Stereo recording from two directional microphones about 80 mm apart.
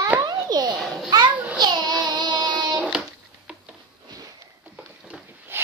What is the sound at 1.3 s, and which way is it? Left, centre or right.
Child singing, centre.